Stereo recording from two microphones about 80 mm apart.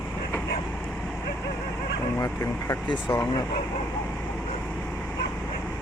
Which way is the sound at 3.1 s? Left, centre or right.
Left.